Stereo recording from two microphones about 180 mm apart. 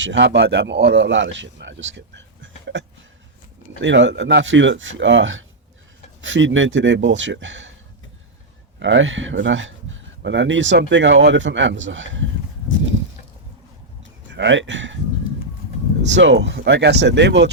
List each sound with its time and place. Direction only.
0.0 s a man's voice: 85° right
3.8 s speech: 85° right
8.8 s speech: 85° right
14.3 s speech: 85° right
16.1 s speech: 80° right